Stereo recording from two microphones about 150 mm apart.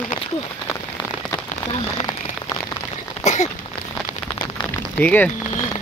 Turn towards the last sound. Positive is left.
turn(degrees=10)  # may be behind; listen again after turning